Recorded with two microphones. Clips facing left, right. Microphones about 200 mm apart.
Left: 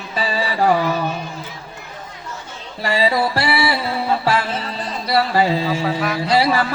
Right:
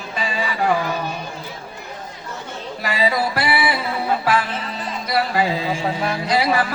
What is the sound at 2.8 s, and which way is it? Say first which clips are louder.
Speech: left 3 dB; 30° left (ahead or behind).